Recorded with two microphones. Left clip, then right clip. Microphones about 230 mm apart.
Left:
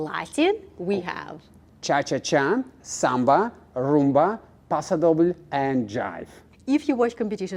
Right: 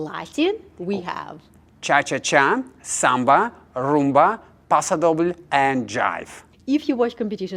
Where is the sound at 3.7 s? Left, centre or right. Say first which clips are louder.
Right 3 dB; right.